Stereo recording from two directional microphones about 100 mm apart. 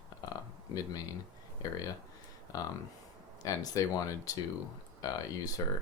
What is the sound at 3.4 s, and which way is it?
Speech, 35° left (ahead or behind).